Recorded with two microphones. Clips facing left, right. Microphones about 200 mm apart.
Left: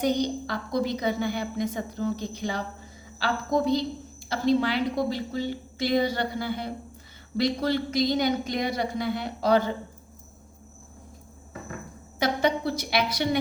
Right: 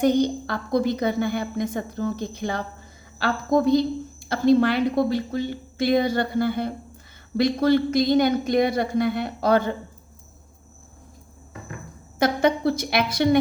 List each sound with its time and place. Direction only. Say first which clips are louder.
0.0 s a woman's voice: right 5 dB; 55° right (ahead or behind)
12.2 s a woman's voice: right 5 dB; 50° right (ahead or behind)